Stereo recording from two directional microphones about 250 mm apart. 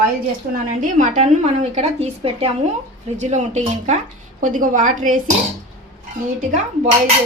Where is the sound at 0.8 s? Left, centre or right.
Right.